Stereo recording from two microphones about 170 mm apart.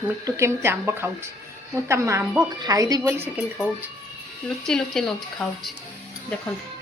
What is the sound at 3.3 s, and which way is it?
Speech, 5° right (ahead or behind).